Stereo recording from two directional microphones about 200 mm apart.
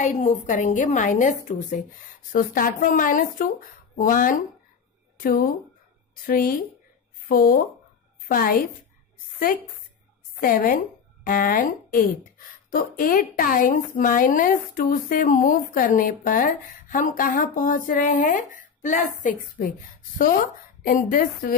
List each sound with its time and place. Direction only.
0.0 s a woman's voice: 40° left (ahead or behind)
10.4 s a woman's voice: 45° left (ahead or behind)
20.8 s a woman's voice: 45° left (ahead or behind)